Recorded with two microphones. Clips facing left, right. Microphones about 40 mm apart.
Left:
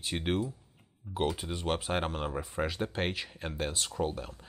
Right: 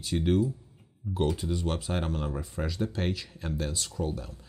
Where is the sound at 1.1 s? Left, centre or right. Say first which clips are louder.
Right 3 dB; centre.